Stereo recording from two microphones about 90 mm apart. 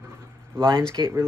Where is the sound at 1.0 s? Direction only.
55° right (ahead or behind).